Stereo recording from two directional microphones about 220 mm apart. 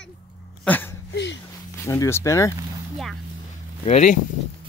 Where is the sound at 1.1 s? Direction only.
55° left (ahead or behind).